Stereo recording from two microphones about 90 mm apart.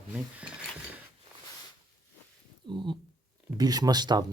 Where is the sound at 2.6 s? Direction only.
60° right (ahead or behind).